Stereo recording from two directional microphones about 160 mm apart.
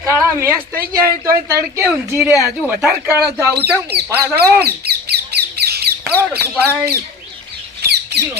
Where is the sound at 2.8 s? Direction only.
15° right (ahead or behind).